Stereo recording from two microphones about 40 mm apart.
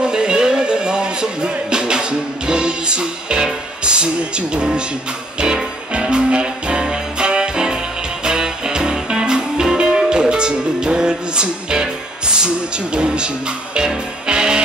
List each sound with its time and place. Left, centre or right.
0.0 s music: right
3.8 s speech: right
5.4 s music: right